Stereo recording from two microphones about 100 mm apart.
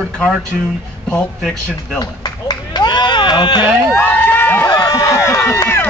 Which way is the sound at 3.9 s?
20° left (ahead or behind).